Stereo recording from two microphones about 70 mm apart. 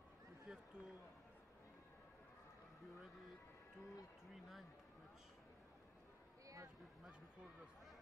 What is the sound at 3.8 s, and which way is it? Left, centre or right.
Speech, centre.